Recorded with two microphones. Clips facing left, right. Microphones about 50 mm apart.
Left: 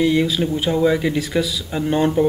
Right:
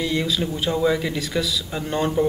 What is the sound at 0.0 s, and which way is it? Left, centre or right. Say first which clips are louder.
Speech: left 6 dB; centre.